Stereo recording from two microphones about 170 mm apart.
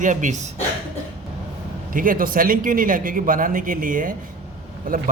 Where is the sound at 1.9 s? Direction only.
55° right (ahead or behind).